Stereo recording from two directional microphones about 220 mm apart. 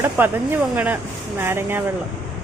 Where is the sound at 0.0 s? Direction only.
10° right (ahead or behind).